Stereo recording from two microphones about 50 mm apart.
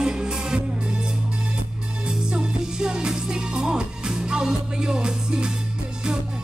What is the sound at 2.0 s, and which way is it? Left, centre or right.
Music, centre.